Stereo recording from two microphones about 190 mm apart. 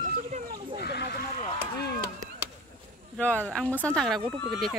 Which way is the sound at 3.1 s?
5° left (ahead or behind).